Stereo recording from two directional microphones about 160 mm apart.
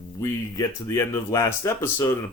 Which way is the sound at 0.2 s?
20° left (ahead or behind).